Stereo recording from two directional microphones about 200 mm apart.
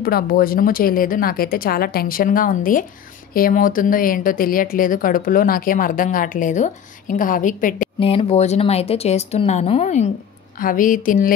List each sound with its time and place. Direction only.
0.0 s a woman's voice: 45° left (ahead or behind)
8.0 s a woman's voice: 30° left (ahead or behind); by 11.3 s 45° left (ahead or behind)